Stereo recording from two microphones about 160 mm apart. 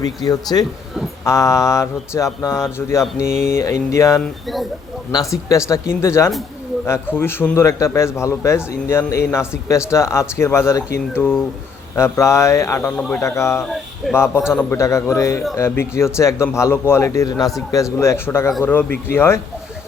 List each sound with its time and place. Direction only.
0.0 s a man's voice: 25° left (ahead or behind)